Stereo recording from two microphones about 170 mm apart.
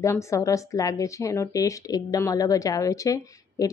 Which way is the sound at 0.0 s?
15° left (ahead or behind).